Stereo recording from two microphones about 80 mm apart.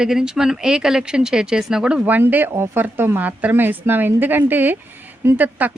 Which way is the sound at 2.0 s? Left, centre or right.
Right.